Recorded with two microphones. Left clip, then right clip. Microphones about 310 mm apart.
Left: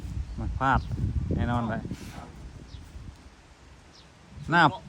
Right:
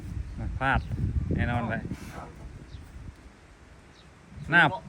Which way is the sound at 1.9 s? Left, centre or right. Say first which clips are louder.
Right 1 dB; centre.